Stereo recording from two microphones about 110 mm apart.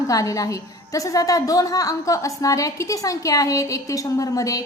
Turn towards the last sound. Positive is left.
turn(degrees=30)  # may be behind; listen again after turning